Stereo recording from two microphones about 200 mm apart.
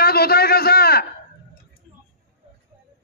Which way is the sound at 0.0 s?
50° left (ahead or behind).